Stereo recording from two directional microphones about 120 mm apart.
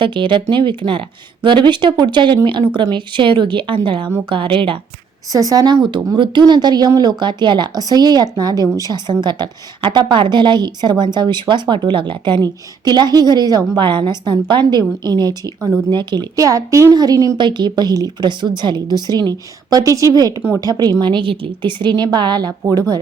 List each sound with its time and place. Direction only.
0.0 s a woman's voice: 40° right (ahead or behind)
5.3 s a woman's voice: 30° right (ahead or behind)
17.3 s a woman's voice: 40° right (ahead or behind)